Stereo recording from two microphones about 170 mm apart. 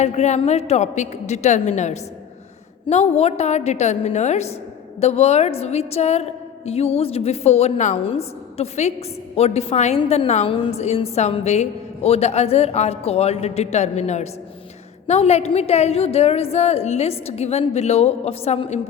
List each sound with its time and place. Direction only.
0.0 s a woman's voice: 40° left (ahead or behind)